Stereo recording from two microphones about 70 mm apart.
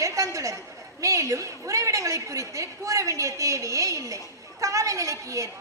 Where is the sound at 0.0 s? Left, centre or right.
Right.